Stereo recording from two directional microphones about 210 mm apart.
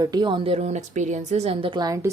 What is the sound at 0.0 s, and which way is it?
A woman's voice, 20° right (ahead or behind).